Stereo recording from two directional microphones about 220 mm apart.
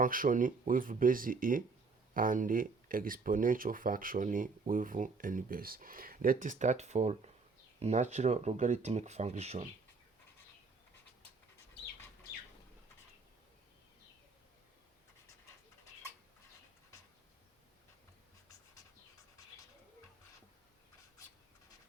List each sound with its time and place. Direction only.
0.0 s speech: 40° right (ahead or behind)